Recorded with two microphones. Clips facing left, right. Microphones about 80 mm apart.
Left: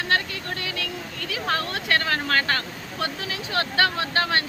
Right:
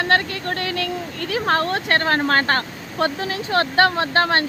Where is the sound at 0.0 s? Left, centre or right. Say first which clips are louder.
Right 6 dB; right.